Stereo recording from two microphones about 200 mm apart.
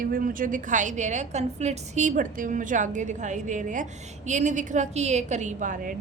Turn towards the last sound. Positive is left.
turn(degrees=-40)  # may be behind; listen again after turning